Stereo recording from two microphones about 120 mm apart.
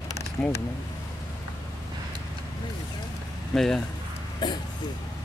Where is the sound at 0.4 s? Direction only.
10° left (ahead or behind).